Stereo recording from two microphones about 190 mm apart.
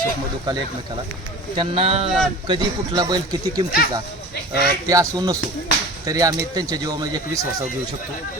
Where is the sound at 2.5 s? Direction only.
20° right (ahead or behind).